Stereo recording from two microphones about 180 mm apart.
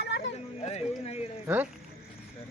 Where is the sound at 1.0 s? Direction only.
35° left (ahead or behind).